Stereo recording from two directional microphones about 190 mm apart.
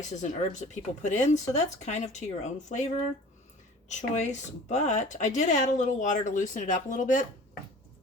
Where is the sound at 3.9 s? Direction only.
40° left (ahead or behind).